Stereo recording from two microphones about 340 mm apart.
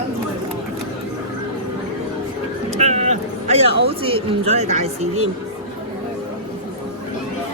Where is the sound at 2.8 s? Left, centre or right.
Centre.